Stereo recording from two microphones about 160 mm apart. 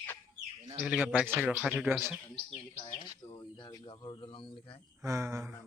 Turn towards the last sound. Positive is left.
turn(degrees=-20)  # may be behind; listen again after turning